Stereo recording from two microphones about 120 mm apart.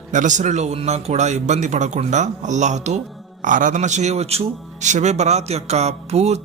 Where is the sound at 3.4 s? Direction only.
90° right.